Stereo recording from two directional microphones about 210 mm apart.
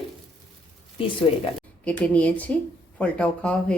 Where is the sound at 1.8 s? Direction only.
5° left (ahead or behind).